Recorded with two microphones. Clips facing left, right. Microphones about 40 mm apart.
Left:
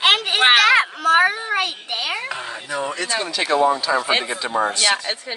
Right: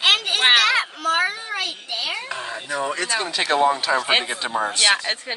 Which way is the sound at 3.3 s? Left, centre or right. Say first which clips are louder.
Left 1 dB; right.